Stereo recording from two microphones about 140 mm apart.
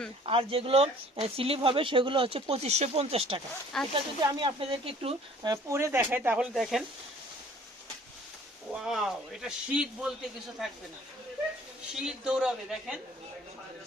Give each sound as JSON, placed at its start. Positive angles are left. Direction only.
{"t": 0.3, "sound": "speech", "side_deg": -40}
{"t": 5.5, "sound": "speech", "side_deg": -20}
{"t": 8.7, "sound": "speech", "side_deg": -5}
{"t": 11.9, "sound": "speech", "side_deg": -5}